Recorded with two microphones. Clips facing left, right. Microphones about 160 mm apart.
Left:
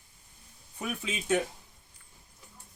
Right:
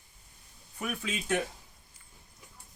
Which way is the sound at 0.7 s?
20° left (ahead or behind).